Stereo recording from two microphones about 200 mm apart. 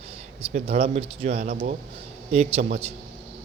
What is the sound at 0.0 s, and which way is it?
A man's voice, 30° right (ahead or behind).